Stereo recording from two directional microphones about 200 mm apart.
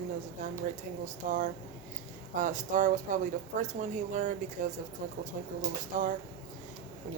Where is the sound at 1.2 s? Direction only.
40° right (ahead or behind).